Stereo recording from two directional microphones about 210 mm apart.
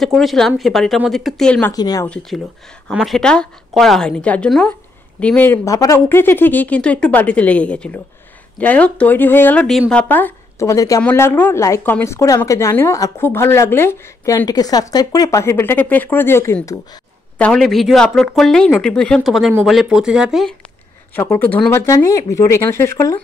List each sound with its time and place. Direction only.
0.0 s speech: centre (ahead or behind)
1.7 s speech: 20° left (ahead or behind)
2.0 s speech: centre (ahead or behind)
17.4 s speech: centre (ahead or behind)
21.1 s speech: 10° left (ahead or behind)